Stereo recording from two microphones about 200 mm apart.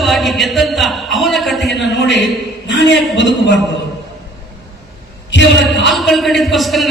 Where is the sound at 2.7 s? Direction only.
65° left (ahead or behind).